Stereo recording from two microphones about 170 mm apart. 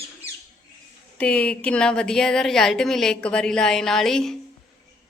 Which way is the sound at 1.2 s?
10° left (ahead or behind).